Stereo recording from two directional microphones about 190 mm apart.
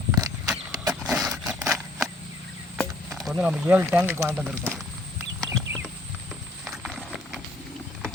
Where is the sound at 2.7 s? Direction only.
Centre (ahead or behind).